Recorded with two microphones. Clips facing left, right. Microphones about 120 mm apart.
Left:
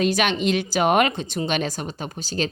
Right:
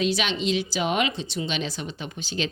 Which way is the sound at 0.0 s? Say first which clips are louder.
Left 4 dB; 50° left (ahead or behind).